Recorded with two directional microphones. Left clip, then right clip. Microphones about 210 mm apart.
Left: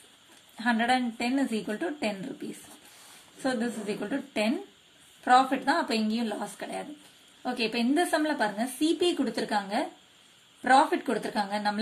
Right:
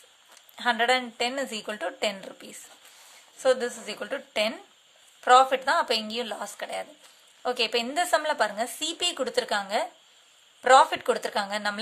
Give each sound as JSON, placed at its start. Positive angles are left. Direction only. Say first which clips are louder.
{"t": 0.6, "sound": "a woman's voice", "louder": "right 3 dB", "side_deg": -40}
{"t": 3.4, "sound": "a woman's voice", "louder": "right 6 dB", "side_deg": -40}